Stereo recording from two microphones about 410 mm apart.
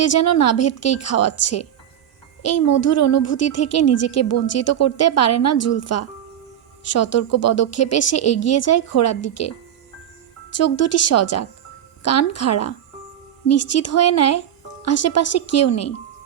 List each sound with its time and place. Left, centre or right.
0.0 s speech: left